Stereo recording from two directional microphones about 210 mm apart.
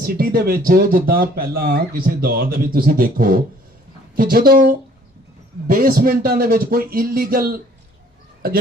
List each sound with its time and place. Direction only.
0.0 s speech: 45° right (ahead or behind)